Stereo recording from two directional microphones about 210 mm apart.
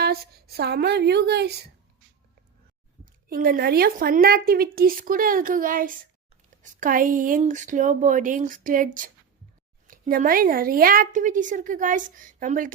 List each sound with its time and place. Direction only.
0.0 s a woman's voice: 50° right (ahead or behind)
3.2 s a woman's voice: 45° right (ahead or behind)